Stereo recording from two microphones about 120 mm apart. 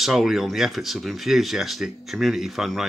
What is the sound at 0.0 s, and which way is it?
Speech, 5° right (ahead or behind).